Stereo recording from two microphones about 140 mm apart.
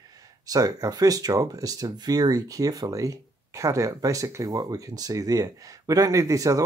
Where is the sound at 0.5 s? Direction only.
25° right (ahead or behind).